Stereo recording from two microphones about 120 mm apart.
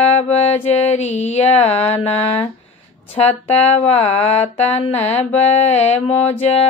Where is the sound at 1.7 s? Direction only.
60° left (ahead or behind).